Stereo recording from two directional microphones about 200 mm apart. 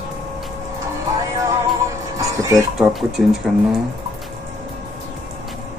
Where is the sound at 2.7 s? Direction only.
Centre (ahead or behind).